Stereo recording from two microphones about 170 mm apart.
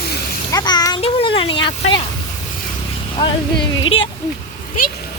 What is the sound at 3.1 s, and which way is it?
Speech, 30° left (ahead or behind).